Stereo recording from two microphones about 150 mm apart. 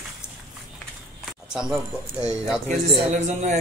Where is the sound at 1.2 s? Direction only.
5° right (ahead or behind).